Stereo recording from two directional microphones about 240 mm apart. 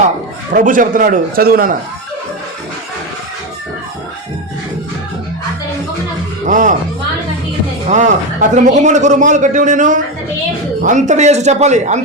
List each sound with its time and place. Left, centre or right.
0.5 s a man's voice: right
6.4 s speech: right
7.9 s a man's voice: right